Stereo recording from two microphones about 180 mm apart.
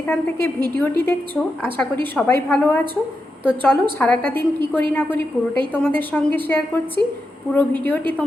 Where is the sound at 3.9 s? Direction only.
10° left (ahead or behind).